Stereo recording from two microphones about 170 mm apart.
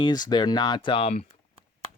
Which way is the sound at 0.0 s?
25° left (ahead or behind).